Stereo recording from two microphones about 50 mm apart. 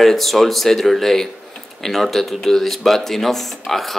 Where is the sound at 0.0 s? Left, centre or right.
Centre.